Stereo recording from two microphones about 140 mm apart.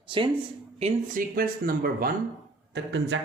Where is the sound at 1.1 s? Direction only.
85° right.